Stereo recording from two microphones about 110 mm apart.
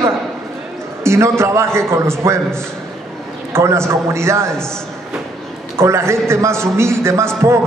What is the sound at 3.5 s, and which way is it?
A man's voice, 25° right (ahead or behind).